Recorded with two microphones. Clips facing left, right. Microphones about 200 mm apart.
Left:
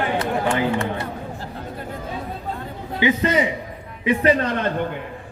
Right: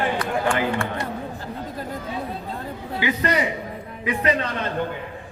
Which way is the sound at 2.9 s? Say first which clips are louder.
Left 4 dB; 20° left (ahead or behind).